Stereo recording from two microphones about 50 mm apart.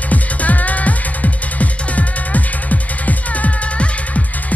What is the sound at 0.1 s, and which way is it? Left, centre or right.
Music, left.